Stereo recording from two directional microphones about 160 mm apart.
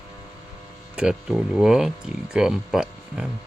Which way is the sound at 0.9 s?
5° right (ahead or behind).